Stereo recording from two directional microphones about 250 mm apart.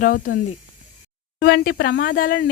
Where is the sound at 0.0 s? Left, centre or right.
Left.